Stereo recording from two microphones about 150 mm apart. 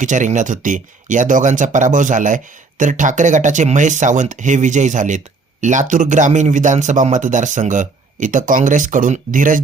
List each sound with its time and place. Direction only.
0.0 s speech: 55° right (ahead or behind)